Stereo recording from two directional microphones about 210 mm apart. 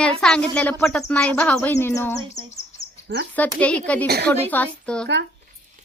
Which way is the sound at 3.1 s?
45° right (ahead or behind).